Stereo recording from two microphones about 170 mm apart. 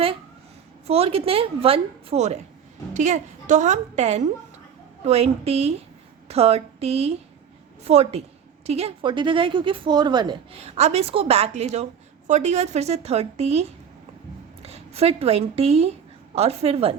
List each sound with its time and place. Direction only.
0.9 s a woman's voice: 35° right (ahead or behind)